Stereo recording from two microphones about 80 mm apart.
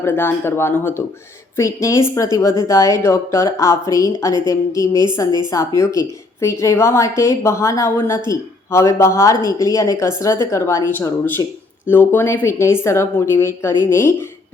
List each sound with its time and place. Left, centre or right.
0.0 s a woman's voice: left